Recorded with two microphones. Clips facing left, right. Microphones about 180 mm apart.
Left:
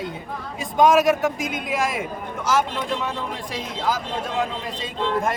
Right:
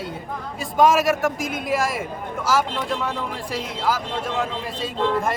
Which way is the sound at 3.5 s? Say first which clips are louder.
Right 1 dB; 10° right (ahead or behind).